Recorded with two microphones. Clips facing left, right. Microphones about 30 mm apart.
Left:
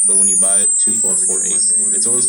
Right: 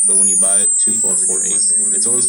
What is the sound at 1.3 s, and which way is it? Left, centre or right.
Speech, left.